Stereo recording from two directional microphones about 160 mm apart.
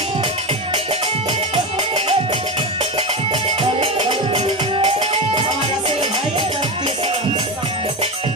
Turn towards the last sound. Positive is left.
turn(degrees=-35)  # may be behind; listen again after turning